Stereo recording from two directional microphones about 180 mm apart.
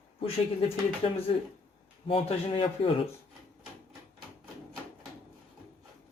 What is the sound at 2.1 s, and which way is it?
Speech, 30° left (ahead or behind).